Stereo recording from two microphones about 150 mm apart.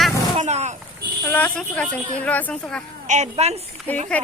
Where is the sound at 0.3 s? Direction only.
50° right (ahead or behind).